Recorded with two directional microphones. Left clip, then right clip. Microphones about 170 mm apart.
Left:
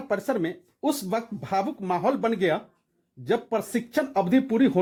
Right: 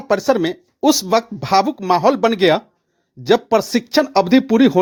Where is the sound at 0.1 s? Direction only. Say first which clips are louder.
Right 11 dB; 35° right (ahead or behind).